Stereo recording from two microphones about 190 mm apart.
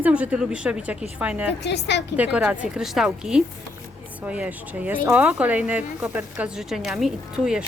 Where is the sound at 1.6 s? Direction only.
65° left (ahead or behind).